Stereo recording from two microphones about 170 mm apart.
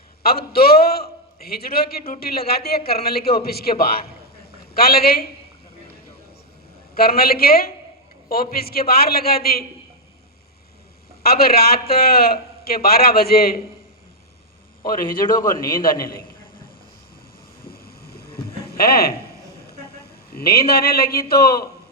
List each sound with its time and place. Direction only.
0.2 s a man's voice: 65° left (ahead or behind)
6.9 s a man's voice: 65° left (ahead or behind)
11.2 s a man's voice: 65° left (ahead or behind)
14.8 s a man's voice: 55° left (ahead or behind)
17.7 s a sound: 65° left (ahead or behind)
20.3 s a man's voice: 65° left (ahead or behind)